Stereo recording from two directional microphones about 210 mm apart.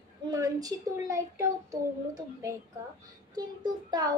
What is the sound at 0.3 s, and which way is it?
Speech, 15° right (ahead or behind).